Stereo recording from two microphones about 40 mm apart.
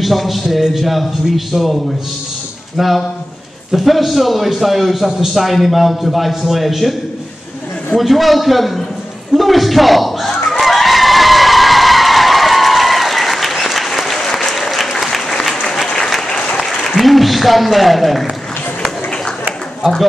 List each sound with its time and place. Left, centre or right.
0.0 s a man's voice: centre
2.8 s a man's voice: centre
8.0 s a man's voice: centre
10.6 s a sound: centre
14.3 s applause: centre
16.3 s applause: left
16.5 s a sound: centre